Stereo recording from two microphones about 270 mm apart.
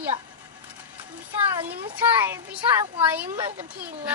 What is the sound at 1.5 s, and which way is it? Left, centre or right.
Speech, centre.